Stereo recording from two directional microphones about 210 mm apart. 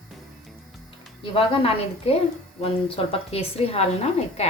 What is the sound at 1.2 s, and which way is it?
A woman's voice, 25° left (ahead or behind).